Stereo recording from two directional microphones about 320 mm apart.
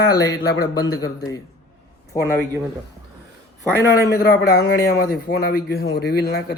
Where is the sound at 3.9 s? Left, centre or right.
Left.